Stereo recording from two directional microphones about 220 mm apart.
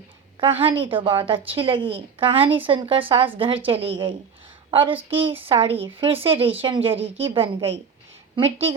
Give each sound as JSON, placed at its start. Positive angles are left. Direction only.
{"t": 0.6, "sound": "a woman's voice", "side_deg": -25}